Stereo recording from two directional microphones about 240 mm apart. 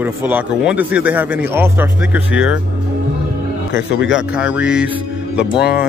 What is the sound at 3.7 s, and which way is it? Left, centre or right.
Speech, left.